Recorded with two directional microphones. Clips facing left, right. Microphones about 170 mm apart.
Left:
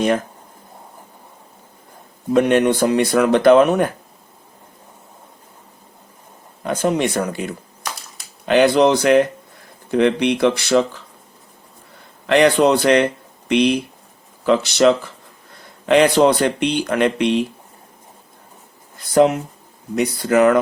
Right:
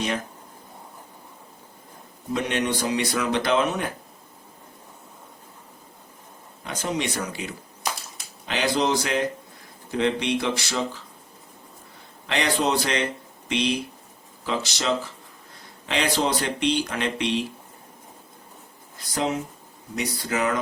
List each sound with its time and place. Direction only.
2.3 s speech: 55° left (ahead or behind)
6.7 s speech: 55° left (ahead or behind)
12.3 s speech: 60° left (ahead or behind)
19.1 s speech: 60° left (ahead or behind)